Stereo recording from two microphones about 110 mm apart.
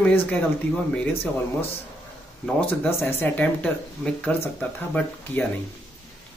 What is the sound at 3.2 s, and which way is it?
Speech, 10° left (ahead or behind).